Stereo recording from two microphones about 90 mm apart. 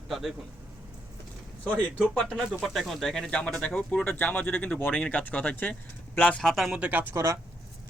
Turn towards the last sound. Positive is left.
turn(degrees=-30)  # may be behind; listen again after turning